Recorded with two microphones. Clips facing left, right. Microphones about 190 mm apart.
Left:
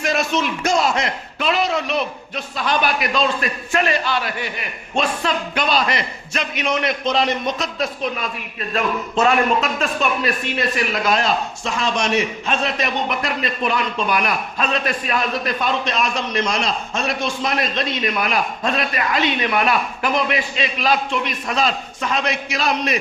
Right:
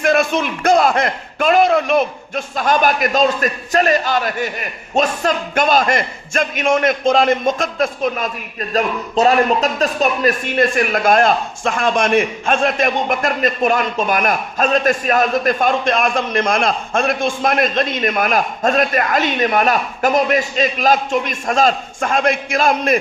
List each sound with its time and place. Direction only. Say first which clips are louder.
0.0 s a man's voice: right 5 dB; 55° right (ahead or behind)